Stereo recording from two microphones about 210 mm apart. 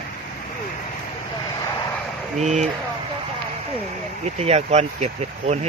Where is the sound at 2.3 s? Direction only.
35° right (ahead or behind).